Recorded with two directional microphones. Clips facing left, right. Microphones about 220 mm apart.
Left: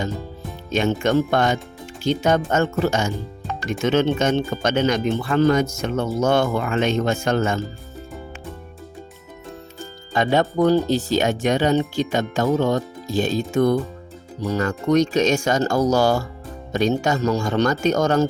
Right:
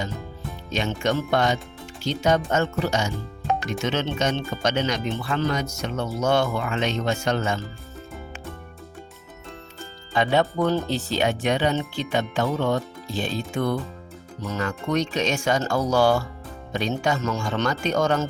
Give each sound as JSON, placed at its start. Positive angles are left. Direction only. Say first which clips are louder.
{"t": 0.7, "sound": "speech", "louder": "left 6 dB", "side_deg": 50}
{"t": 10.1, "sound": "speech", "louder": "left 2 dB", "side_deg": 45}